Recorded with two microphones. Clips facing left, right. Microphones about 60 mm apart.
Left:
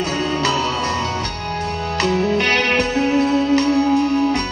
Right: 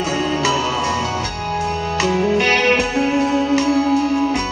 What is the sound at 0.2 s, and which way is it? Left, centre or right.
Music, centre.